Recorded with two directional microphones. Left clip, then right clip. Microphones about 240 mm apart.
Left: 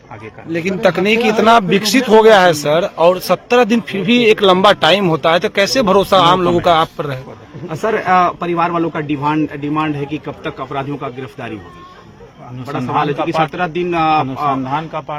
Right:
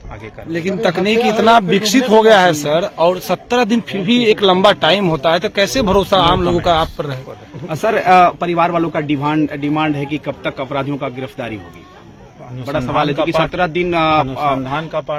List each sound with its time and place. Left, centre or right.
0.5 s a man's voice: centre
7.7 s speech: right
13.2 s speech: right
14.5 s a man's voice: centre